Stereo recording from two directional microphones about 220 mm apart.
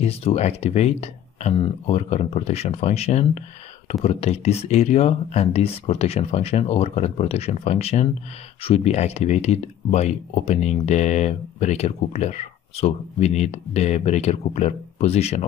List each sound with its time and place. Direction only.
0.0 s speech: 30° left (ahead or behind)